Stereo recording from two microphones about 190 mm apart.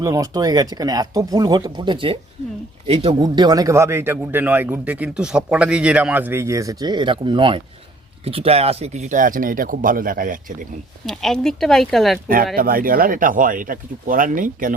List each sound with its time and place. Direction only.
0.0 s a man's voice: 20° right (ahead or behind); by 10.4 s 45° right (ahead or behind)
11.0 s speech: 5° left (ahead or behind)
12.5 s speech: 50° right (ahead or behind)